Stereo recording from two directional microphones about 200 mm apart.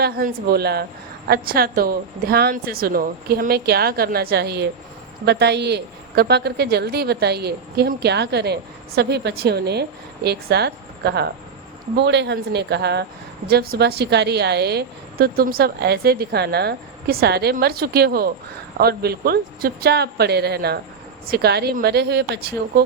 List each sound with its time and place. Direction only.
0.0 s a woman's voice: 50° right (ahead or behind)